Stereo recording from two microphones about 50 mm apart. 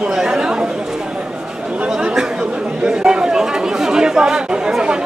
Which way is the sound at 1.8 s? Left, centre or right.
Centre.